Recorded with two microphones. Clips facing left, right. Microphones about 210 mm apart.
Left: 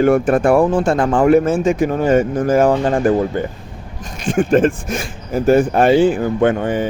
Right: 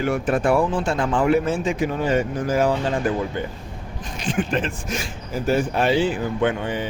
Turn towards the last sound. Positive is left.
turn(degrees=45)  # may be behind; listen again after turning